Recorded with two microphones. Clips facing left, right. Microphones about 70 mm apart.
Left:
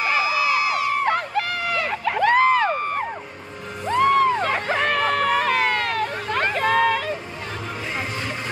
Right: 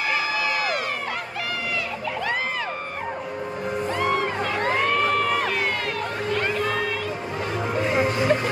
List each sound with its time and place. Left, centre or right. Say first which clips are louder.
0.4 s crowd: left 4 dB; right
1.0 s crowd: left 7 dB; left
4.0 s crowd: left 9 dB; left
7.9 s music: right 7 dB; centre